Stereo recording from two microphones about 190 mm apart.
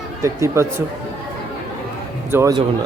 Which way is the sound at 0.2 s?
15° right (ahead or behind).